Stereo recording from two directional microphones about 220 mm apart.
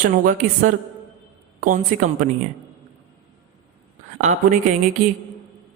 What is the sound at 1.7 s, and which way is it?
Speech, 35° right (ahead or behind).